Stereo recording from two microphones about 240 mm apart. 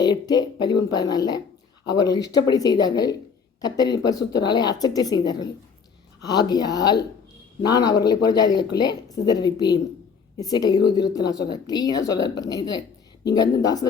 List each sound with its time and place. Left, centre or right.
0.0 s speech: centre